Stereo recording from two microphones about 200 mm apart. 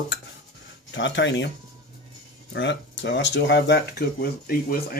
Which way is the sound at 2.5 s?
65° left (ahead or behind).